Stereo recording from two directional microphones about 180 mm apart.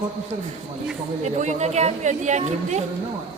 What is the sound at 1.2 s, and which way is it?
Speech, 40° right (ahead or behind).